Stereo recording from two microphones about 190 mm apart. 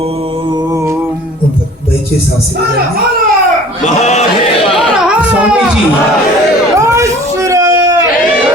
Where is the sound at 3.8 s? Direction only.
35° left (ahead or behind).